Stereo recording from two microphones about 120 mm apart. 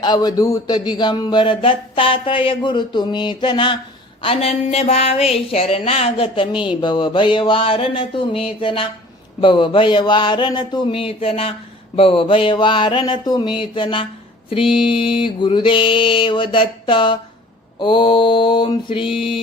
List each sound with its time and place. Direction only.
0.0 s a man's voice: 35° left (ahead or behind)
6.8 s mantra: 40° left (ahead or behind)